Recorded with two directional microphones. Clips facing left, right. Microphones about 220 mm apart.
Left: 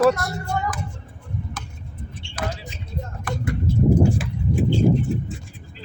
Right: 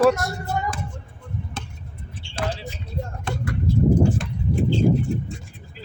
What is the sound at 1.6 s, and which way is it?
Tick-tock, 25° right (ahead or behind).